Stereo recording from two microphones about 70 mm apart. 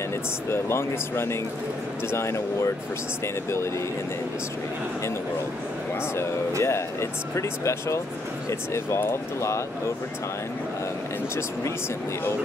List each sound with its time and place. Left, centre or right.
0.5 s speech: left
6.6 s speech: left